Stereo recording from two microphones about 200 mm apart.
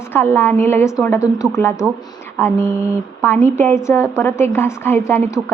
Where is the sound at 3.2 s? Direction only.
10° left (ahead or behind).